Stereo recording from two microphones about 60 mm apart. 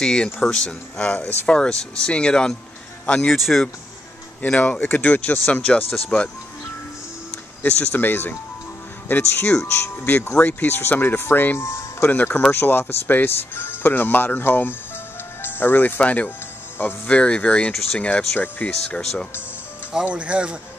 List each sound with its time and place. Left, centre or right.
0.0 s speech: centre
1.1 s speech: left
3.3 s speech: centre
4.6 s speech: left
9.1 s speech: left
10.0 s speech: left
11.5 s speech: left
12.1 s speech: left
16.0 s speech: left
16.7 s speech: left
17.1 s speech: centre
19.9 s speech: centre